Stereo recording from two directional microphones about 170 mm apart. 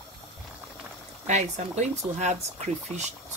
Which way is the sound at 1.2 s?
45° right (ahead or behind).